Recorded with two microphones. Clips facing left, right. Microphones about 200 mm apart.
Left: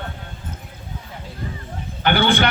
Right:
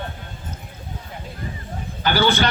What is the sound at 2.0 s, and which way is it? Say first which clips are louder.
Speech: left 1 dB; 60° left (ahead or behind).